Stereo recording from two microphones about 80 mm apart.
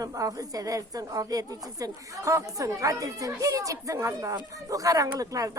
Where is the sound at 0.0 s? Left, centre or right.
Right.